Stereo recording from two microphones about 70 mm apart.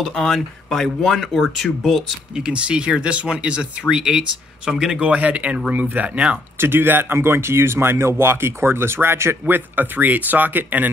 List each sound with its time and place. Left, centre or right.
0.0 s speech: centre
2.3 s speech: centre
5.0 s speech: centre
6.6 s speech: right
9.8 s speech: right